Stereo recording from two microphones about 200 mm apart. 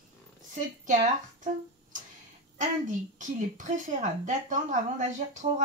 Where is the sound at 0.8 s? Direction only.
40° right (ahead or behind).